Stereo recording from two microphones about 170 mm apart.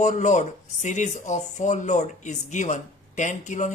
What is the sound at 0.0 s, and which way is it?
Speech, 45° left (ahead or behind).